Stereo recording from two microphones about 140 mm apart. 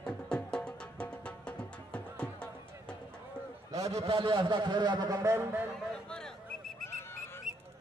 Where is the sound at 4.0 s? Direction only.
40° right (ahead or behind); by 5.6 s 20° right (ahead or behind).